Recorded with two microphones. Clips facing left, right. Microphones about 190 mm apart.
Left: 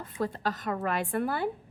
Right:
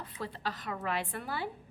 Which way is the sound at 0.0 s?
45° left (ahead or behind).